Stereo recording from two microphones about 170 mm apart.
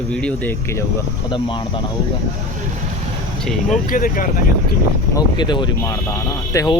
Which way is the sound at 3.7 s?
50° left (ahead or behind).